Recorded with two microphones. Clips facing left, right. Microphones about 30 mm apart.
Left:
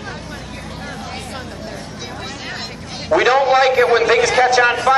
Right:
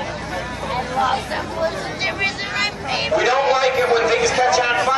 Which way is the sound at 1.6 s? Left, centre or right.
Right.